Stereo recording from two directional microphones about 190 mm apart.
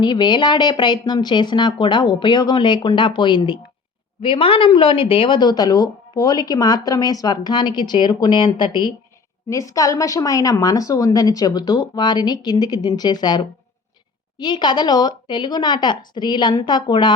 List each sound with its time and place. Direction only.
0.0 s a woman's voice: 20° left (ahead or behind)